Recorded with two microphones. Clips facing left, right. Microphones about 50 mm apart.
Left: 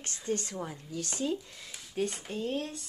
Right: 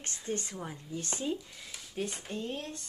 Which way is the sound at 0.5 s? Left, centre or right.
Centre.